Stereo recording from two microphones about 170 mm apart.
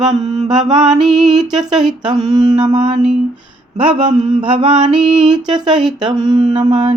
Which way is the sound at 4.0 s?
40° right (ahead or behind).